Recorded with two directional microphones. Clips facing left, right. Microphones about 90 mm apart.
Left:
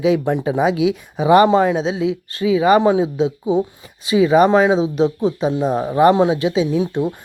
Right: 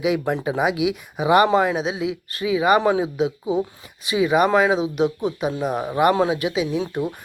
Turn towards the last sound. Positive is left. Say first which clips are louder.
# left 5 dB
turn(degrees=20)  # may be behind; listen again after turning